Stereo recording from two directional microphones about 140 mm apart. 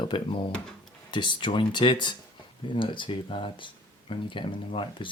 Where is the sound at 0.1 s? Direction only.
35° left (ahead or behind).